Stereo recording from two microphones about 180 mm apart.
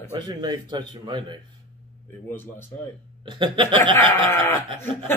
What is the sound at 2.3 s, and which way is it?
Speech, 10° left (ahead or behind).